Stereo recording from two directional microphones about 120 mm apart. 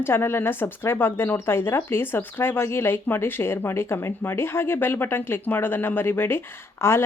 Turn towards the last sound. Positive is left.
turn(degrees=20)  # may be behind; listen again after turning